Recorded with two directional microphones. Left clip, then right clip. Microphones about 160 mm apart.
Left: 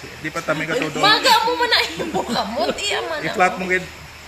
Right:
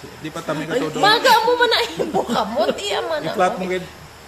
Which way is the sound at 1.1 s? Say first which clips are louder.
Right 1 dB; 35° right (ahead or behind).